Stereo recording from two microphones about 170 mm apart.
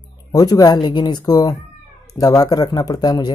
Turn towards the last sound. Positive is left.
turn(degrees=25)  # may be behind; listen again after turning